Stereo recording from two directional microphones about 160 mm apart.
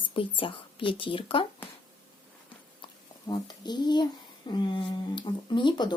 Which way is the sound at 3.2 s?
25° left (ahead or behind).